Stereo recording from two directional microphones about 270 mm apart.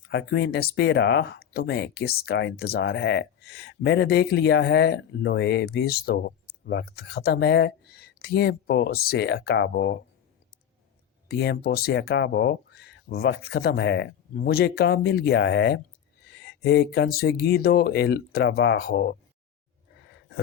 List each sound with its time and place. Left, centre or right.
0.1 s speech: left
11.3 s speech: left